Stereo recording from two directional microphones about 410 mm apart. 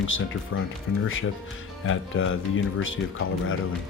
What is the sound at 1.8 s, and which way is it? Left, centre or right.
Speech, left.